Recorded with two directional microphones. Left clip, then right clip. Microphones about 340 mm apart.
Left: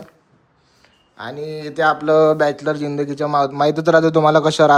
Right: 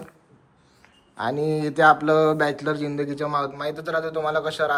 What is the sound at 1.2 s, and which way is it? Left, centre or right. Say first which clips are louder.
Speech: right 3 dB; centre.